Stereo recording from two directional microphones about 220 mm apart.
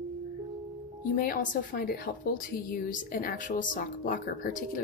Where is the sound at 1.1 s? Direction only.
40° left (ahead or behind).